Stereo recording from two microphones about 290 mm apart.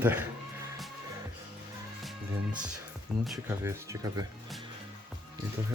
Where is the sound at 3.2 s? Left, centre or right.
Centre.